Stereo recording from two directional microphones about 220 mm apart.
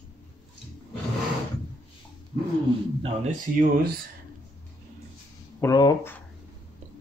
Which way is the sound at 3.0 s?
30° right (ahead or behind).